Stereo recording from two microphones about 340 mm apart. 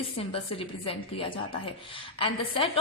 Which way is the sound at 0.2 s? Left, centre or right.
Centre.